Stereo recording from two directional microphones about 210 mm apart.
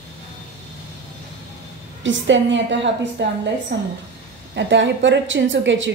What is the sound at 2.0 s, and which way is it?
A woman's voice, 60° right (ahead or behind).